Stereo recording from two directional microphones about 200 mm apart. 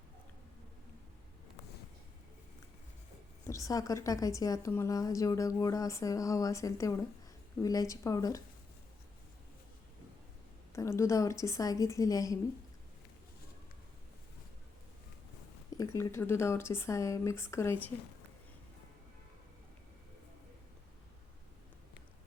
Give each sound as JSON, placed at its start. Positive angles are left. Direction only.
{"t": 3.4, "sound": "a woman's voice", "side_deg": 15}
{"t": 10.7, "sound": "a woman's voice", "side_deg": 15}
{"t": 15.8, "sound": "a woman's voice", "side_deg": 15}